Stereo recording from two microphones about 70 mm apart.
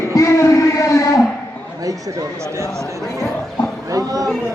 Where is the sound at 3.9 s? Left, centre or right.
Right.